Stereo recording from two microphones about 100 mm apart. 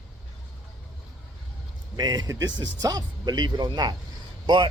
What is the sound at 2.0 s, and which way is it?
Speech, 40° right (ahead or behind).